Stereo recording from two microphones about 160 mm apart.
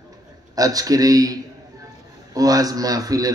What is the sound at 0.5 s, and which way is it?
A man's voice, 25° right (ahead or behind).